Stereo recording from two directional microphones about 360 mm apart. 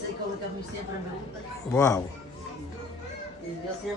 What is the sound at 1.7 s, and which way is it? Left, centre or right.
Speech, centre.